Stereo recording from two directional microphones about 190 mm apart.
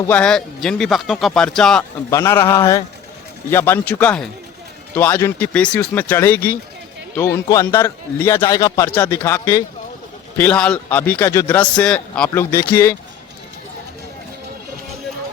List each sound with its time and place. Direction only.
0.0 s speech: 5° left (ahead or behind)
2.0 s a man's voice: 15° left (ahead or behind)